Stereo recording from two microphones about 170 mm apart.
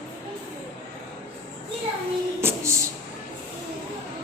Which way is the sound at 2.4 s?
15° right (ahead or behind).